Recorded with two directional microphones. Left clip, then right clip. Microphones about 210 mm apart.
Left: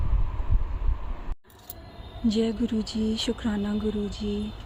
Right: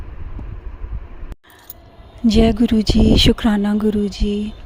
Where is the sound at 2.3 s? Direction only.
40° right (ahead or behind).